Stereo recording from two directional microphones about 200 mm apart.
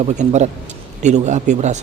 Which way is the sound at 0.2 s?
35° right (ahead or behind).